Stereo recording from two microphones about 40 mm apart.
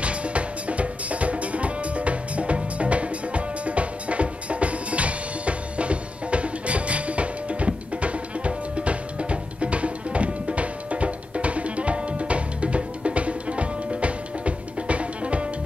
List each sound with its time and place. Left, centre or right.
0.0 s music: right